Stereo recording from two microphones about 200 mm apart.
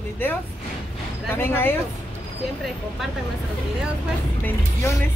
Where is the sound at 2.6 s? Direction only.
Centre (ahead or behind).